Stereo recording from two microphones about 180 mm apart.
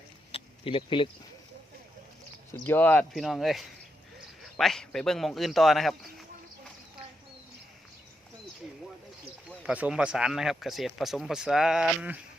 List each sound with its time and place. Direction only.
0.3 s a sound: 30° left (ahead or behind)
2.5 s speech: 10° left (ahead or behind)
9.6 s speech: 5° right (ahead or behind)